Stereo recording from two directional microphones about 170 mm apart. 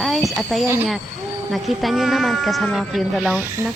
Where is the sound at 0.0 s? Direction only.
Centre (ahead or behind).